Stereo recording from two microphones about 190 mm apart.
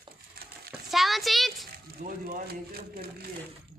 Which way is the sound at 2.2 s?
55° right (ahead or behind).